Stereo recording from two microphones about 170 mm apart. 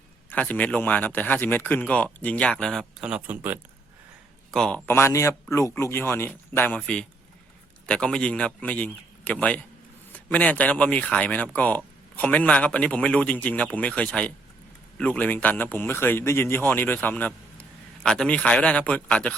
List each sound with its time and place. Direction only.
0.3 s a man's voice: 10° left (ahead or behind); by 3.6 s 10° right (ahead or behind)
4.5 s a man's voice: 5° left (ahead or behind)